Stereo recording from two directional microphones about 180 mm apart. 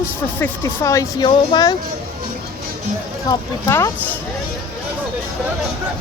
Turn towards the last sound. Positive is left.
turn(degrees=15)  # may be behind; listen again after turning